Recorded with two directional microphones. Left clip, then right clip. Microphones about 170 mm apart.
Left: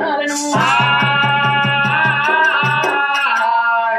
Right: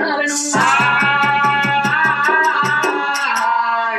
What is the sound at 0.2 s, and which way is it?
Music, 15° left (ahead or behind).